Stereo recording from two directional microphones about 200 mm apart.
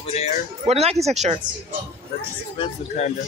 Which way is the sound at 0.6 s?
30° right (ahead or behind).